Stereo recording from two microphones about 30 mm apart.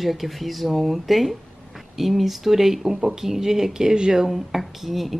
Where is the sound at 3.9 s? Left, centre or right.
Right.